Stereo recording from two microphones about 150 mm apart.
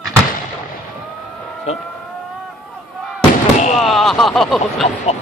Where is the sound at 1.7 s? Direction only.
45° left (ahead or behind).